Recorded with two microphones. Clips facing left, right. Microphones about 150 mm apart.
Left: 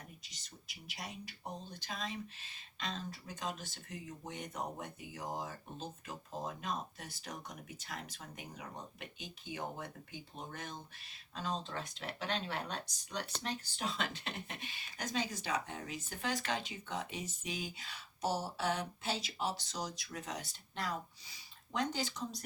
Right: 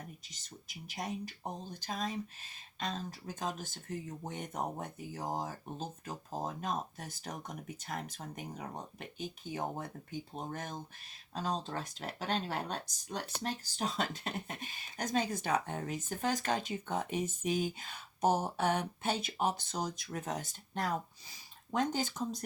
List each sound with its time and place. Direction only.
0.3 s speech: 45° right (ahead or behind)